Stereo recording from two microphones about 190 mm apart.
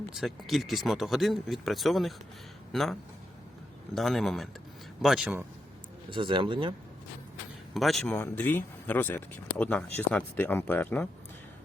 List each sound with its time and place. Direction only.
0.1 s speech: centre (ahead or behind)
6.1 s speech: 25° right (ahead or behind)
7.7 s speech: centre (ahead or behind)